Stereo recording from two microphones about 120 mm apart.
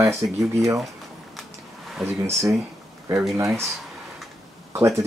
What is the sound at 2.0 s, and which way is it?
Speech, 20° right (ahead or behind).